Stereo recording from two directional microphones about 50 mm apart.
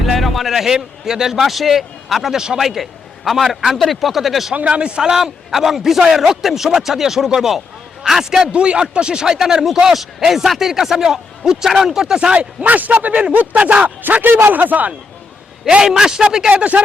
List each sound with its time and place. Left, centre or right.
0.0 s a man's voice: centre
2.6 s a man's voice: centre
4.5 s speech: right
8.5 s speech: right
12.6 s speech: right
15.9 s speech: centre
16.5 s speech: right